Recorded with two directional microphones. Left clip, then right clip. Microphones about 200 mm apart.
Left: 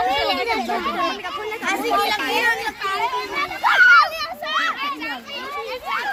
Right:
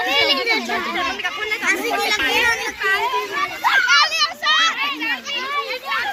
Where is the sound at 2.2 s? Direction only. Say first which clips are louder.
Right 2 dB; 60° left (ahead or behind).